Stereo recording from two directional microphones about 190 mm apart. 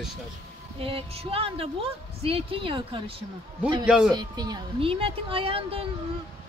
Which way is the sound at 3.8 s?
5° right (ahead or behind).